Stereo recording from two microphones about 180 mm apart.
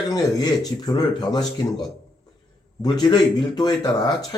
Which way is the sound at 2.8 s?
25° left (ahead or behind).